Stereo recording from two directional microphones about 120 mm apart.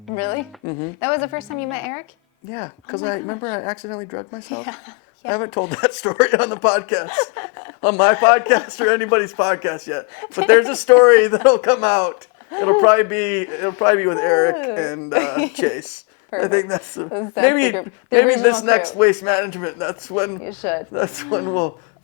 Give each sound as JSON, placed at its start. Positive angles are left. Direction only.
{"t": 2.6, "sound": "speech", "side_deg": 30}